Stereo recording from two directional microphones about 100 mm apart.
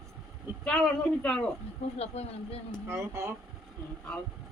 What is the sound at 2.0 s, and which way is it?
Speech, 85° left.